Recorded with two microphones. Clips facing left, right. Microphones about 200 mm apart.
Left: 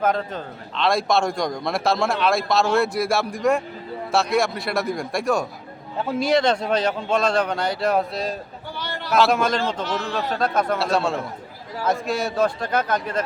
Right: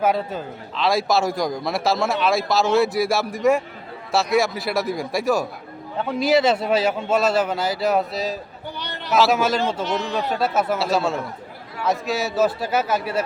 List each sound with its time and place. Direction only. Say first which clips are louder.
0.0 s a man's voice: right 1 dB; 10° right (ahead or behind)
8.8 s a sound: left 1 dB; 20° right (ahead or behind)
9.1 s a man's voice: right 1 dB; centre (ahead or behind)
9.8 s speech: right 2 dB; 20° right (ahead or behind)
10.3 s a man's voice: even; 5° right (ahead or behind)